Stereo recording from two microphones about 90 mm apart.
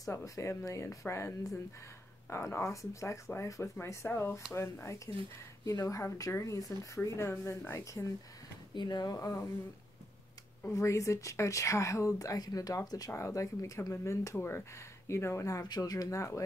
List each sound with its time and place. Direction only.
0.0 s speech: 35° left (ahead or behind)
8.7 s speech: 50° left (ahead or behind)
10.7 s speech: 35° left (ahead or behind)
15.6 s speech: 45° left (ahead or behind)